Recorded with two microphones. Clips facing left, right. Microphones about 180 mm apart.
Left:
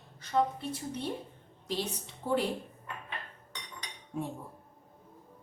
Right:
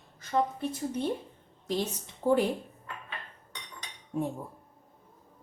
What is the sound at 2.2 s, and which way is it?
Speech, 45° right (ahead or behind).